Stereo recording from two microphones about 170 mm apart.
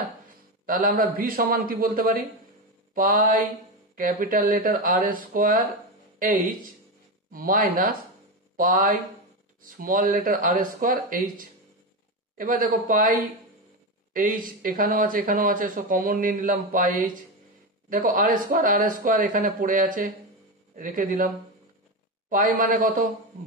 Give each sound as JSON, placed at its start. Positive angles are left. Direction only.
{"t": 0.7, "sound": "speech", "side_deg": -55}
{"t": 2.9, "sound": "mantra", "side_deg": -55}
{"t": 3.9, "sound": "speech", "side_deg": -55}
{"t": 22.3, "sound": "speech", "side_deg": -55}